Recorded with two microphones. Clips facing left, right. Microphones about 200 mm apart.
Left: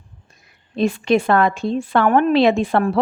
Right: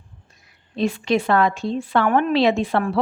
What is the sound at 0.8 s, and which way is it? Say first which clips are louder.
A woman's voice: left 3 dB; 50° left (ahead or behind).